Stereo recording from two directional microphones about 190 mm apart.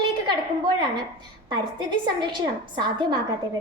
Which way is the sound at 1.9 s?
25° right (ahead or behind).